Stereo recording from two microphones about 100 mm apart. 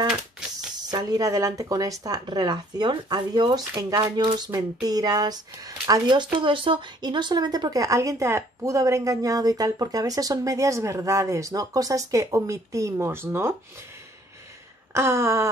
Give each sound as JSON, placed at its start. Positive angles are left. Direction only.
{"t": 0.1, "sound": "typewriter", "side_deg": -5}
{"t": 0.9, "sound": "speech", "side_deg": -40}
{"t": 15.0, "sound": "a sound", "side_deg": -25}